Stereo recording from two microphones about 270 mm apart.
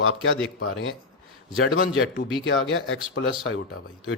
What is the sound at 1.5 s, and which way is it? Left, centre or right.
Speech, left.